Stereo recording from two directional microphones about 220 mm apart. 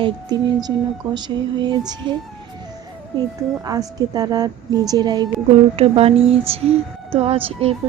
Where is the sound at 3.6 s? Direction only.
15° right (ahead or behind).